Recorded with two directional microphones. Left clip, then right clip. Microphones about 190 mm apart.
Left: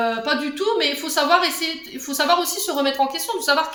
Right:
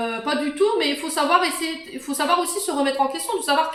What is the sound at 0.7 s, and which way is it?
A woman's voice, 45° left (ahead or behind).